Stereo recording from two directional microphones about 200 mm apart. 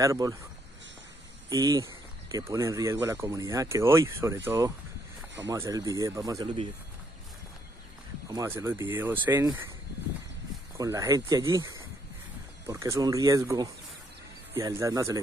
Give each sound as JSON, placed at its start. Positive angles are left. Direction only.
{"t": 0.0, "sound": "speech", "side_deg": -15}
{"t": 1.5, "sound": "speech", "side_deg": -20}
{"t": 8.3, "sound": "speech", "side_deg": -15}
{"t": 10.8, "sound": "speech", "side_deg": -15}